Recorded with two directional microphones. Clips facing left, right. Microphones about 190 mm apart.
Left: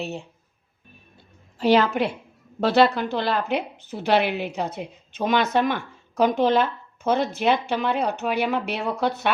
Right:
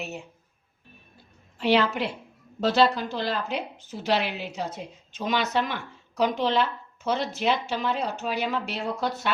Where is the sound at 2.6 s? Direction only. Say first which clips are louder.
Left 3 dB; 60° left (ahead or behind).